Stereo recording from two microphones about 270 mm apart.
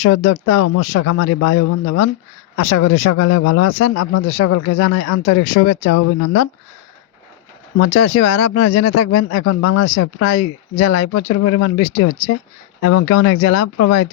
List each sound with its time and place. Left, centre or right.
0.0 s speech: left
7.8 s speech: left